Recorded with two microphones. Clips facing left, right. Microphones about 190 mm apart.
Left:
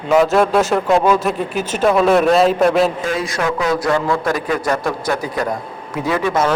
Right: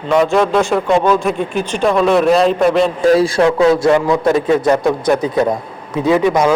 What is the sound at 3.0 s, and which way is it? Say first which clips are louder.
A man's voice: right 9 dB; 30° right (ahead or behind).